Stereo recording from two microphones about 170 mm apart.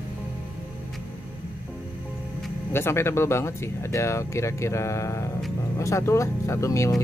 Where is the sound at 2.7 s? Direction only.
15° left (ahead or behind).